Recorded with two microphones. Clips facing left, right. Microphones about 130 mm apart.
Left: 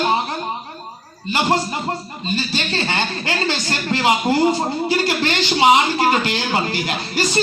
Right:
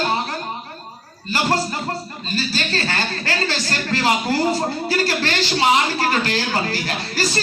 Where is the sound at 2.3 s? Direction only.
25° left (ahead or behind).